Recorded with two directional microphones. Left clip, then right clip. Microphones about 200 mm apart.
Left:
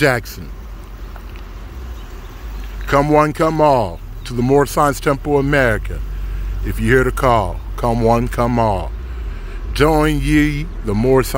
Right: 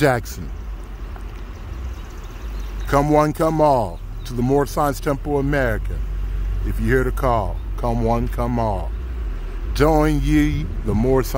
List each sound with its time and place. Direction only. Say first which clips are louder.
0.0 s a man's voice: left 3 dB; centre (ahead or behind)
2.9 s speech: left 3 dB; 10° left (ahead or behind)
4.6 s speech: left 6 dB; 15° left (ahead or behind)
9.8 s a man's voice: left 3 dB; 5° left (ahead or behind)